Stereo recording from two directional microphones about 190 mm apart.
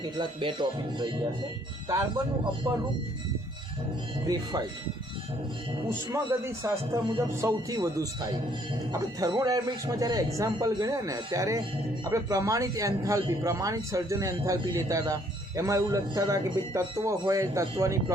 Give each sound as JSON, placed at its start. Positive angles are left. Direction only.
{"t": 0.0, "sound": "a man's voice", "side_deg": -25}
{"t": 2.7, "sound": "speech", "side_deg": -20}
{"t": 4.3, "sound": "a man's voice", "side_deg": -20}
{"t": 6.1, "sound": "a man's voice", "side_deg": -15}